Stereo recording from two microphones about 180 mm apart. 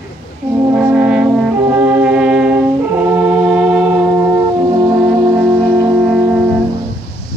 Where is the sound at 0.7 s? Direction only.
10° right (ahead or behind).